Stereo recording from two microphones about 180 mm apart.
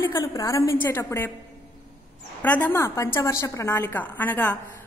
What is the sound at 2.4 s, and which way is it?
A woman's voice, 10° left (ahead or behind).